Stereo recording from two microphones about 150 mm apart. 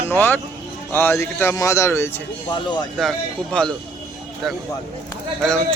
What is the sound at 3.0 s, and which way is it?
Speech, 5° left (ahead or behind).